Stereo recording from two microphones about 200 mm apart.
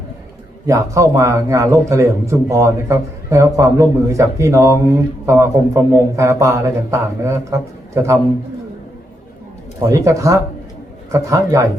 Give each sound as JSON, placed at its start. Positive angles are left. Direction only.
{"t": 0.7, "sound": "a man's voice", "side_deg": -15}
{"t": 9.9, "sound": "a man's voice", "side_deg": -15}